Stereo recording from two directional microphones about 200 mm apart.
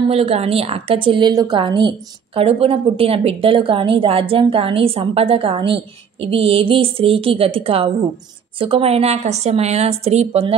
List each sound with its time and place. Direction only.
0.1 s a woman's voice: 30° right (ahead or behind)